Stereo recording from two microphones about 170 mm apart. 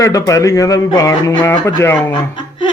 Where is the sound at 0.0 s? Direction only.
20° left (ahead or behind).